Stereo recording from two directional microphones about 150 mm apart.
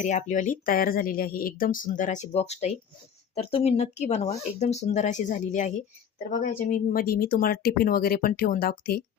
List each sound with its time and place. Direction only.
0.0 s speech: 55° left (ahead or behind)
6.7 s speech: 65° left (ahead or behind)